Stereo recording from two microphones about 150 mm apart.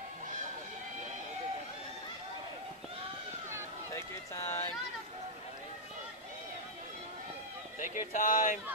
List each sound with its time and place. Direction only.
3.9 s run: 20° left (ahead or behind)
7.8 s speech: 60° left (ahead or behind)